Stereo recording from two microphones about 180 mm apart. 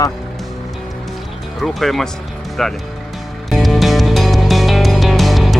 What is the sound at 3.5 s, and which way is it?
Music, centre (ahead or behind).